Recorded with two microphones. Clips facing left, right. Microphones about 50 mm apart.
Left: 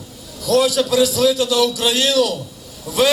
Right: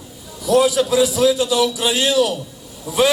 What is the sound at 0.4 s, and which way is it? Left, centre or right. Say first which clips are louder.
A man's voice: right 1 dB; centre.